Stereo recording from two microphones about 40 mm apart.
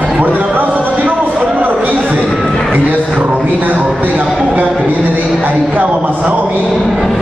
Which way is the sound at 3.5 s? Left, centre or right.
Right.